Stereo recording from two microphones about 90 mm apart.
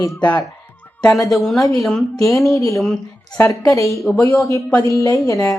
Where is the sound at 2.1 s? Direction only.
35° left (ahead or behind).